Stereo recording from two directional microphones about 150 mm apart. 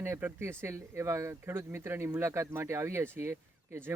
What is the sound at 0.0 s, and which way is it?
Speech, 15° right (ahead or behind).